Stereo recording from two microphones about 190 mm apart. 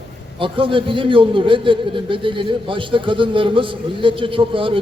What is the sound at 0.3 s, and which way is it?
A man's voice, 25° right (ahead or behind).